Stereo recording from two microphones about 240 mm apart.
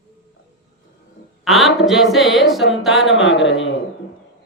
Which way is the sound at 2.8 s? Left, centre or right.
Centre.